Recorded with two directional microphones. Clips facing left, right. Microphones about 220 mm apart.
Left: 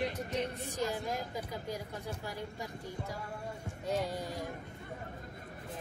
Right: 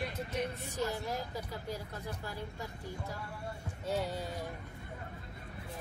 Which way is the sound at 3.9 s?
15° left (ahead or behind).